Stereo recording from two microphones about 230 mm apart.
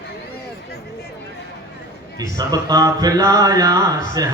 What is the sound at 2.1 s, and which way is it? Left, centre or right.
Speech, centre.